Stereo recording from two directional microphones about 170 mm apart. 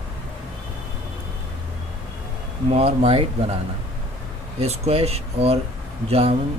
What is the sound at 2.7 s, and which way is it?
Speech, 35° right (ahead or behind).